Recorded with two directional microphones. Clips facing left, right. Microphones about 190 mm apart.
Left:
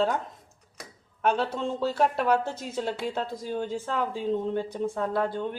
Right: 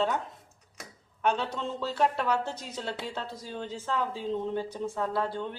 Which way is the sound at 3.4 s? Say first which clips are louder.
Left 7 dB; 50° left (ahead or behind).